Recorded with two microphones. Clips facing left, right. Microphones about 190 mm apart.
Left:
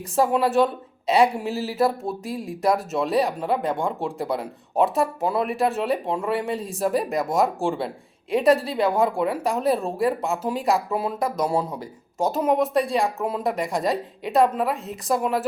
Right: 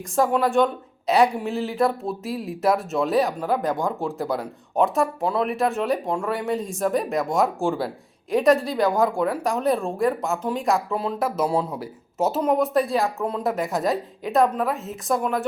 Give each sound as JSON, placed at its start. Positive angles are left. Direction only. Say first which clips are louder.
{"t": 0.2, "sound": "speech", "louder": "even", "side_deg": 5}
{"t": 3.6, "sound": "speech", "louder": "right 1 dB", "side_deg": 30}
{"t": 3.8, "sound": "speech", "louder": "right 1 dB", "side_deg": 0}
{"t": 11.2, "sound": "speech", "louder": "right 2 dB", "side_deg": -5}